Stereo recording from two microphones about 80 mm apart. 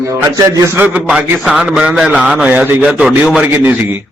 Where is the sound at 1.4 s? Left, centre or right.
Centre; by 4.0 s right.